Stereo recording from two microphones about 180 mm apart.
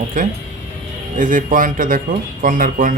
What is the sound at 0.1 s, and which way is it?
A man's voice, 45° right (ahead or behind).